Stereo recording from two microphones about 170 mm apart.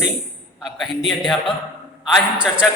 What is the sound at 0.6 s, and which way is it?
A man's voice, centre (ahead or behind).